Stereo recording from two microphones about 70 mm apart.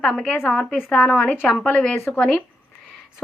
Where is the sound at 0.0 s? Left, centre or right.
Centre.